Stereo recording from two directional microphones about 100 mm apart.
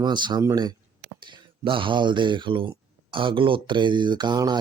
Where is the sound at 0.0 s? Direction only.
50° right (ahead or behind).